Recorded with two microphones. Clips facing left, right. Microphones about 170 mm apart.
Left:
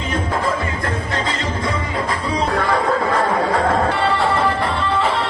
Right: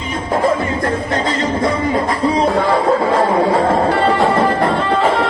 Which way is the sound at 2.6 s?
25° right (ahead or behind).